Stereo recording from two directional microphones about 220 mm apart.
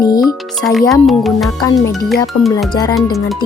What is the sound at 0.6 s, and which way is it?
Speech, centre (ahead or behind).